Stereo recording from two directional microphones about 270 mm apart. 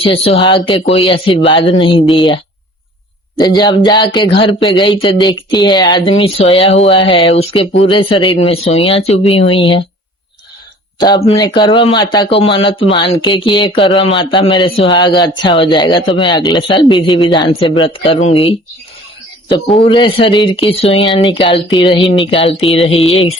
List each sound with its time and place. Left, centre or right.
0.0 s speech: centre
11.0 s speech: centre
19.7 s speech: left